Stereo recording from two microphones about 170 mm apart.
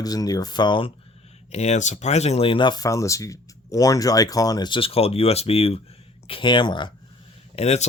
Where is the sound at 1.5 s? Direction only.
40° left (ahead or behind).